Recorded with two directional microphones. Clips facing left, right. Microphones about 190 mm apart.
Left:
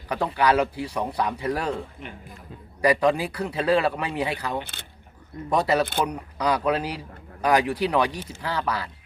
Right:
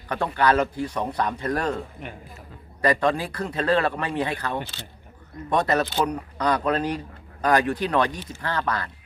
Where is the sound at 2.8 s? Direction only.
10° left (ahead or behind).